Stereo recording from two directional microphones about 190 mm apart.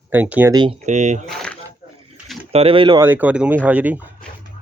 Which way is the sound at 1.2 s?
5° left (ahead or behind).